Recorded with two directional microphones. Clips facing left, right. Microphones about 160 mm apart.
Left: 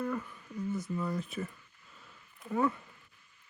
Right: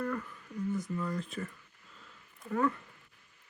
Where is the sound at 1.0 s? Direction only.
5° left (ahead or behind).